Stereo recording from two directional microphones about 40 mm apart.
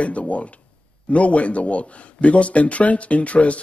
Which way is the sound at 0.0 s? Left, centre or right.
Left.